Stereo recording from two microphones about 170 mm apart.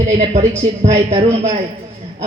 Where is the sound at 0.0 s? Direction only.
40° right (ahead or behind).